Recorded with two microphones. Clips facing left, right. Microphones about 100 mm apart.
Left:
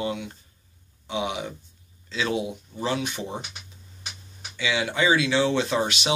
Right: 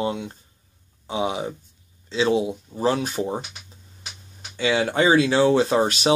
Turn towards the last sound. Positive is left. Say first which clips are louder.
# right 5 dB
turn(degrees=-40)  # may be behind; listen again after turning